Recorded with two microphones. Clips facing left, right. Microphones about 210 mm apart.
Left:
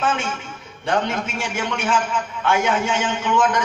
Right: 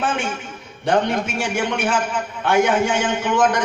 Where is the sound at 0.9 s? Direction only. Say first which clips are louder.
Right 3 dB; 55° right (ahead or behind).